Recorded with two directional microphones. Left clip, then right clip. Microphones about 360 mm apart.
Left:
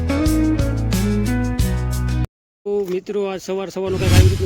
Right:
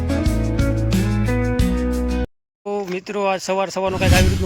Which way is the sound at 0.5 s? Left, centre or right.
Centre.